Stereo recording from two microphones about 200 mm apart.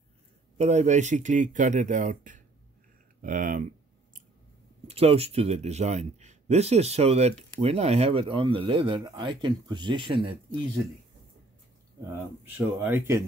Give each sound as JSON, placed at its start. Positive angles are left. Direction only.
{"t": 0.6, "sound": "speech", "side_deg": -35}
{"t": 4.8, "sound": "speech", "side_deg": -30}
{"t": 12.1, "sound": "speech", "side_deg": -10}